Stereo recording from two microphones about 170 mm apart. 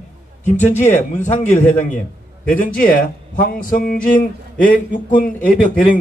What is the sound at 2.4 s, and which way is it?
A man's voice, 55° left (ahead or behind).